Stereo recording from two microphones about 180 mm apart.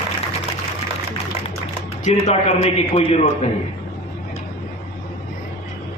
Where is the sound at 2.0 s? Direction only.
40° left (ahead or behind).